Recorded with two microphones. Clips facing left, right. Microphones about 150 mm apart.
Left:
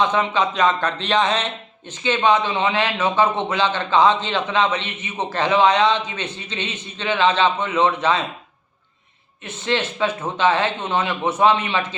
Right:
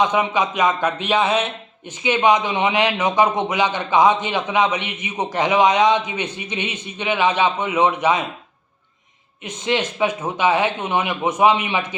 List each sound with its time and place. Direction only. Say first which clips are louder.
0.0 s a man's voice: right 1 dB; 15° right (ahead or behind)
9.4 s a man's voice: right 1 dB; 15° right (ahead or behind)